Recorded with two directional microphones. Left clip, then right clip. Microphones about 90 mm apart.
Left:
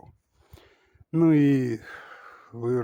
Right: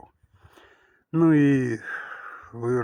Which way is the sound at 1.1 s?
30° left (ahead or behind).